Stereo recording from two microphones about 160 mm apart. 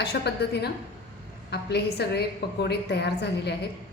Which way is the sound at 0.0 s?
90° left.